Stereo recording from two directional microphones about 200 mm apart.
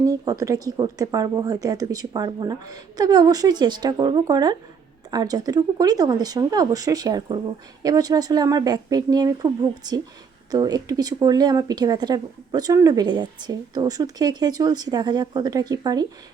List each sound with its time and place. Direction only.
0.0 s speech: 15° right (ahead or behind)